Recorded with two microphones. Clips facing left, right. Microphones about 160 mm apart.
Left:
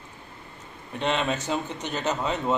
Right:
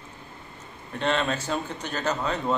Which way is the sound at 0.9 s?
15° left (ahead or behind).